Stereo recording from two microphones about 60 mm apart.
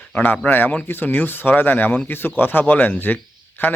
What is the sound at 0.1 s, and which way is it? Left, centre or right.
Speech, left.